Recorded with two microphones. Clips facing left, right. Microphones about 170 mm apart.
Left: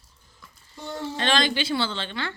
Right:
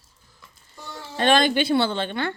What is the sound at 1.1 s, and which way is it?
Speech, 50° right (ahead or behind).